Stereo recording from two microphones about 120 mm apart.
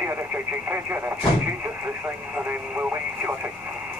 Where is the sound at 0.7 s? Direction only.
20° right (ahead or behind).